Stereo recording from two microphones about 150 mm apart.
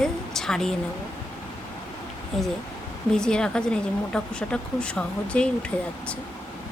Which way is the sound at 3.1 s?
5° left (ahead or behind).